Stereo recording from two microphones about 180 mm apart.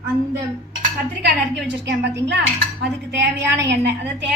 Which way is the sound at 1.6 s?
75° right (ahead or behind).